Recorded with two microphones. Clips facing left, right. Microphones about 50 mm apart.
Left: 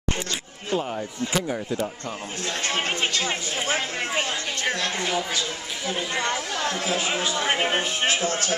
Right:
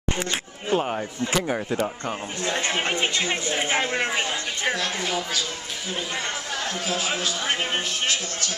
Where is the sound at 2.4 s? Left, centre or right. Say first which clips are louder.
Right 2 dB; right.